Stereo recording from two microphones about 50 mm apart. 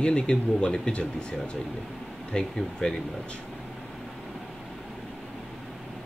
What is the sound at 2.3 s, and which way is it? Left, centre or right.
Speech, centre.